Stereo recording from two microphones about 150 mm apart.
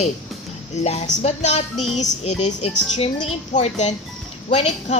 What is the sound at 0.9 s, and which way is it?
Speech, 50° left (ahead or behind).